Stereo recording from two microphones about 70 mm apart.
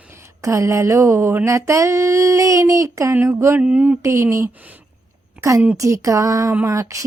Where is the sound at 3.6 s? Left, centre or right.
Centre.